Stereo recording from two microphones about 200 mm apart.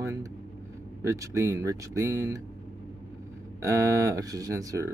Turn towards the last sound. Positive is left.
turn(degrees=-15)  # may be behind; listen again after turning